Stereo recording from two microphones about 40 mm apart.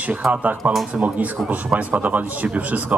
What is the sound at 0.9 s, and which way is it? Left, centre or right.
A man's voice, right.